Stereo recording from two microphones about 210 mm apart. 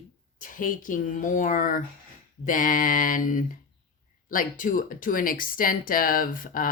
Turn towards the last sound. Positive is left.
turn(degrees=40)  # may be behind; listen again after turning